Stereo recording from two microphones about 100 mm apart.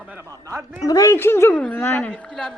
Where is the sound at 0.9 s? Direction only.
35° left (ahead or behind).